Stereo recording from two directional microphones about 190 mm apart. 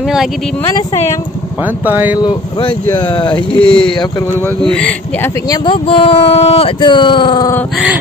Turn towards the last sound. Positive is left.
turn(degrees=20)  # may be behind; listen again after turning